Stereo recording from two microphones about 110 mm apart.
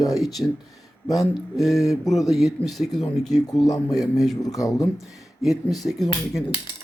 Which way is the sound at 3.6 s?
35° left (ahead or behind).